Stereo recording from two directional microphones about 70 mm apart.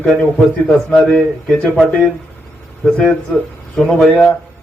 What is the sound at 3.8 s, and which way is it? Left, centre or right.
Speech, centre.